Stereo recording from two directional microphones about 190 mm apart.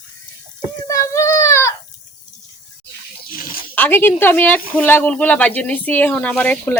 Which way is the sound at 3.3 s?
50° left (ahead or behind).